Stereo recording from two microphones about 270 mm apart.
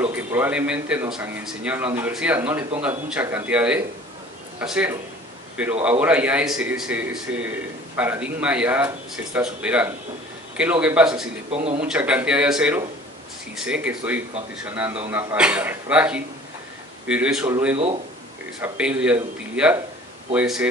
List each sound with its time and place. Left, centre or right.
0.0 s a man's voice: centre
11.5 s speech: right
11.8 s speech: centre